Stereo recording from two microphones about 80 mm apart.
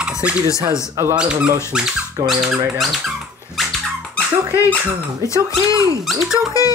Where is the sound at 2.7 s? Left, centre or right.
Centre.